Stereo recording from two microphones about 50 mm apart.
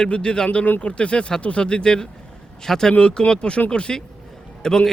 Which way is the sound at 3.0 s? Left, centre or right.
Left.